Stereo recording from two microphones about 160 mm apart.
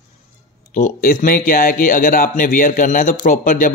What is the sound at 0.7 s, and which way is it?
Speech, 55° left (ahead or behind).